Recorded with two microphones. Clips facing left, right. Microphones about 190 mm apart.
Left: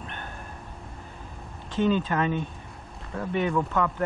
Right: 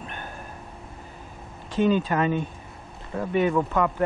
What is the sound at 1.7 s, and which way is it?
Speech, 10° right (ahead or behind).